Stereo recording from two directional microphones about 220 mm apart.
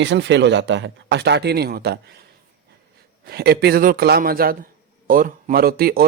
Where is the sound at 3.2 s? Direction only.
45° right (ahead or behind).